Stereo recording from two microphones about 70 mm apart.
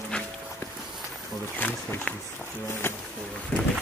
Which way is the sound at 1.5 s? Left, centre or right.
Centre.